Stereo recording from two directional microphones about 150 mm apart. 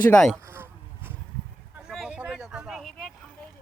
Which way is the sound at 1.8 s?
5° right (ahead or behind).